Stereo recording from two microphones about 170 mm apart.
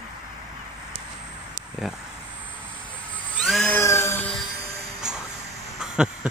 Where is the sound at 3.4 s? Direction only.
Centre (ahead or behind).